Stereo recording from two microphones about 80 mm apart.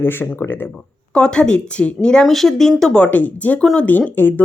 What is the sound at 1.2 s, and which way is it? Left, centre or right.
Speech, centre.